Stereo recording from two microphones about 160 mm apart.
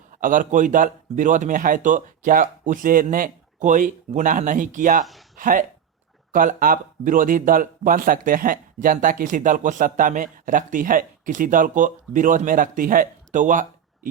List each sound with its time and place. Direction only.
0.1 s speech: 55° right (ahead or behind)